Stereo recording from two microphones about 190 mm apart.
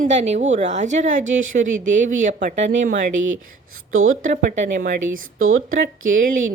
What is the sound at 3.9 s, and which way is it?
Speech, 90° right.